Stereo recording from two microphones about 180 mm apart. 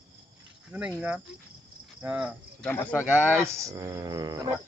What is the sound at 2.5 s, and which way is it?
Speech, 10° left (ahead or behind).